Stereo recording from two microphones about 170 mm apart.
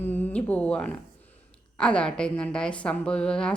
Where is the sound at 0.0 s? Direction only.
10° left (ahead or behind).